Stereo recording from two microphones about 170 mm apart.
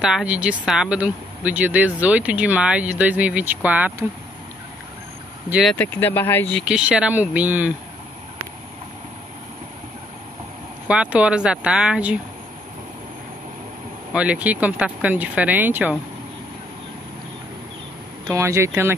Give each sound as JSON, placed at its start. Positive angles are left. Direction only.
{"t": 0.0, "sound": "speech", "side_deg": -5}
{"t": 5.5, "sound": "speech", "side_deg": 0}
{"t": 5.8, "sound": "speech", "side_deg": 10}
{"t": 6.6, "sound": "speech", "side_deg": -5}
{"t": 10.9, "sound": "speech", "side_deg": -5}
{"t": 14.1, "sound": "speech", "side_deg": -5}
{"t": 18.2, "sound": "speech", "side_deg": -15}